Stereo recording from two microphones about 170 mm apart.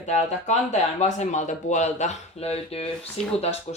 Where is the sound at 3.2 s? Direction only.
5° left (ahead or behind).